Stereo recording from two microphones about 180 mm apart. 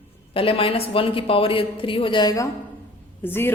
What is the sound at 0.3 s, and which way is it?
A man's voice, 30° left (ahead or behind).